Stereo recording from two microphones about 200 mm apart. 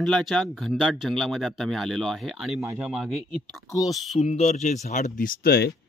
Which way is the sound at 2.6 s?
15° right (ahead or behind).